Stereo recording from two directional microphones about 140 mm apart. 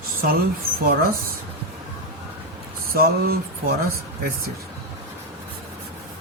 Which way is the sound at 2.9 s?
90° right.